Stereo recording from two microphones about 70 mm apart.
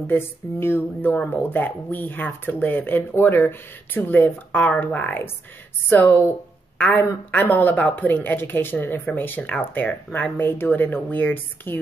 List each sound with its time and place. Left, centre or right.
0.0 s speech: left